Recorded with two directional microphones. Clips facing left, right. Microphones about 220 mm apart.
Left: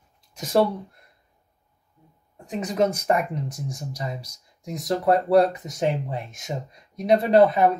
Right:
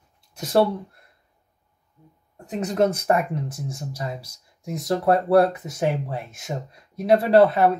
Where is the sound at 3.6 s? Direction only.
15° left (ahead or behind).